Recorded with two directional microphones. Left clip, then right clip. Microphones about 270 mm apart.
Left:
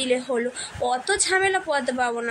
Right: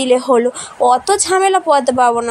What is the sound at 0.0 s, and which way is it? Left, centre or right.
A woman's voice, right.